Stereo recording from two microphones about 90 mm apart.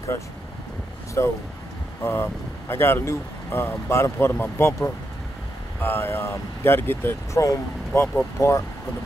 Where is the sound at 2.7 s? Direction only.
25° left (ahead or behind).